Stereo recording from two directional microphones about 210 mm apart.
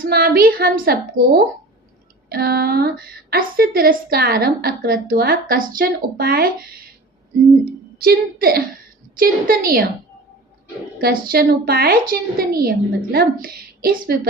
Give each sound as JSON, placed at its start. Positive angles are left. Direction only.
{"t": 0.0, "sound": "a woman's voice", "side_deg": -45}
{"t": 7.6, "sound": "a woman's voice", "side_deg": -45}
{"t": 11.0, "sound": "a woman's voice", "side_deg": -45}